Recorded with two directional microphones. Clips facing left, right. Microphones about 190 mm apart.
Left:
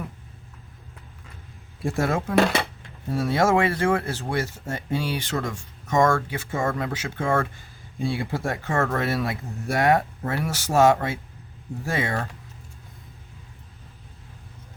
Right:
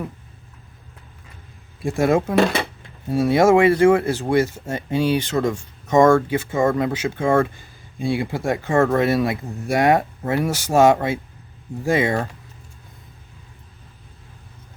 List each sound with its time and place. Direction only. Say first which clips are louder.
1.9 s speech: right 6 dB; 15° right (ahead or behind)